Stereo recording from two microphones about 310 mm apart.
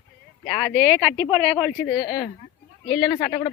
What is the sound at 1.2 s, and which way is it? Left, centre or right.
Speech, centre.